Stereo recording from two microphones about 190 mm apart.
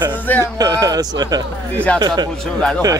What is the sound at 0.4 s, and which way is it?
A man's voice, 20° right (ahead or behind).